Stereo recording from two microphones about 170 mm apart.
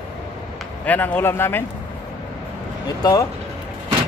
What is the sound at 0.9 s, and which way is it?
Speech, 10° left (ahead or behind).